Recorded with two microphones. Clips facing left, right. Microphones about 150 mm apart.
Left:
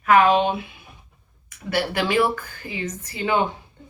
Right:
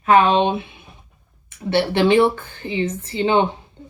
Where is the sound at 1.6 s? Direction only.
25° right (ahead or behind).